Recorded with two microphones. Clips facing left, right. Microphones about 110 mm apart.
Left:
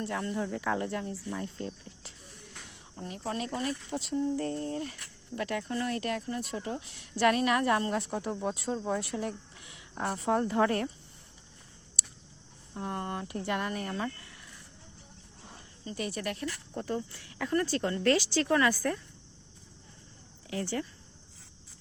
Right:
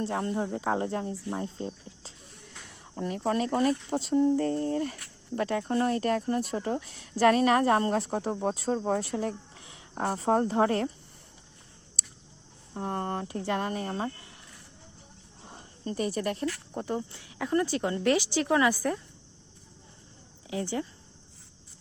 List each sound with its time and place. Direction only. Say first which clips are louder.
0.0 s a woman's voice: right 3 dB; 30° right (ahead or behind)
2.7 s a sound: right 9 dB; 75° right (ahead or behind)
3.1 s speech: right 7 dB; 55° right (ahead or behind)
4.4 s a woman's voice: right 5 dB; 35° right (ahead or behind)
8.7 s speech: right 5 dB; 55° right (ahead or behind)
9.1 s a sound: right 3 dB; 35° right (ahead or behind)
9.9 s speech: right 3 dB; 55° right (ahead or behind)
10.2 s a woman's voice: right 2 dB; 40° right (ahead or behind)
12.0 s a sound: even; 35° right (ahead or behind)
12.7 s a woman's voice: right 4 dB; 45° right (ahead or behind); by 14.3 s 25° right (ahead or behind)
15.8 s a woman's voice: right 5 dB; 45° right (ahead or behind)
16.7 s speech: right 2 dB; 20° right (ahead or behind)
20.5 s speech: right 2 dB; 20° right (ahead or behind)